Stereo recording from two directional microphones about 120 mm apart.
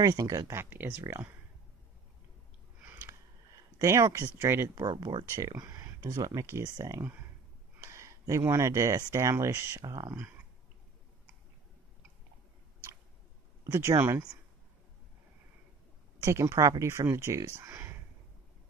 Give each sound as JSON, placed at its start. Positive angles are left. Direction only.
{"t": 0.0, "sound": "speech", "side_deg": -30}
{"t": 3.7, "sound": "speech", "side_deg": -25}
{"t": 13.7, "sound": "speech", "side_deg": -20}
{"t": 16.2, "sound": "speech", "side_deg": -25}